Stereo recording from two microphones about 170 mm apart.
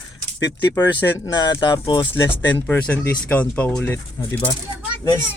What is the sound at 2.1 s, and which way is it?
Speech, 10° left (ahead or behind).